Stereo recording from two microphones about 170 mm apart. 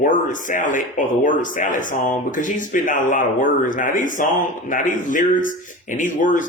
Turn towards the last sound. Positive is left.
turn(degrees=50)  # may be behind; listen again after turning